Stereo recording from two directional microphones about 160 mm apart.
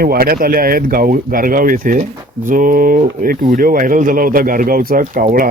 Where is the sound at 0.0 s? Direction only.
65° right (ahead or behind).